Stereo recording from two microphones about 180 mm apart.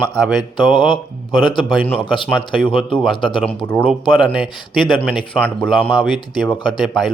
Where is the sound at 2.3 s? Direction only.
Centre (ahead or behind).